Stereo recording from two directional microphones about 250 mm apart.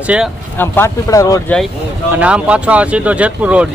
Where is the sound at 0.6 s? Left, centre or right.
Centre.